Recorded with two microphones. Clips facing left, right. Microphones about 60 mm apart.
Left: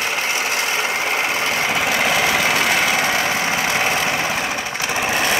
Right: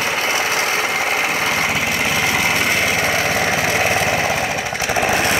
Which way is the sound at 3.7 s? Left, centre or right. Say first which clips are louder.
Right 2 dB; centre.